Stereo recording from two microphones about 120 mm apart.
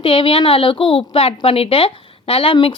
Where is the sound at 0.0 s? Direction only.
45° left (ahead or behind).